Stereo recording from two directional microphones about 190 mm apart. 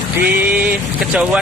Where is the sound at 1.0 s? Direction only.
5° right (ahead or behind).